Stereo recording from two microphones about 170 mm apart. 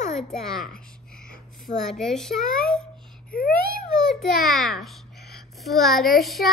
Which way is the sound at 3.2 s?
60° left (ahead or behind).